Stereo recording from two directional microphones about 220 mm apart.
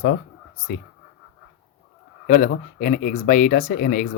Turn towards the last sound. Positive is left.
turn(degrees=40)  # may be behind; listen again after turning